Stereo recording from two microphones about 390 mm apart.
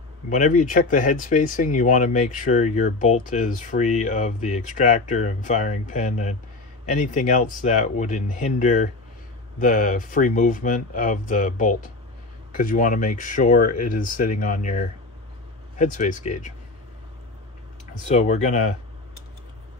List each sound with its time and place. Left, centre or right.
0.3 s speech: centre
17.9 s speech: centre